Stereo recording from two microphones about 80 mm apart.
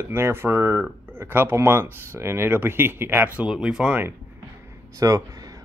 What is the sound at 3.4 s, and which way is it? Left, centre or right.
Speech, centre.